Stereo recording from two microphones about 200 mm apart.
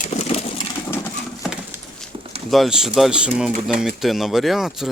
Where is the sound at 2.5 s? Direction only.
Centre (ahead or behind).